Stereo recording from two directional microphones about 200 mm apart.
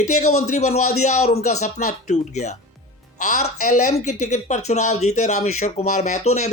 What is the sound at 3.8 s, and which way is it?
Speech, 35° left (ahead or behind).